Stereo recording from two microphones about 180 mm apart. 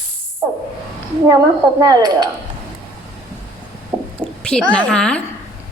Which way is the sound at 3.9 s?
10° right (ahead or behind).